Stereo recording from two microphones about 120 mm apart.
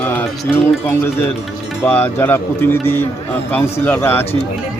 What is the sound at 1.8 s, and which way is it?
Speech, 20° left (ahead or behind).